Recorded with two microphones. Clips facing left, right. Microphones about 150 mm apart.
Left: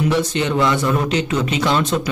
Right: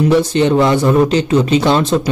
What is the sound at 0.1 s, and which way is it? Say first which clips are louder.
A man's voice: right 7 dB; 35° right (ahead or behind).